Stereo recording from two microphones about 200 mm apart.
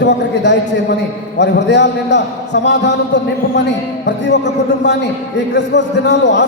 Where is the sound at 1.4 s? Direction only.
60° left (ahead or behind).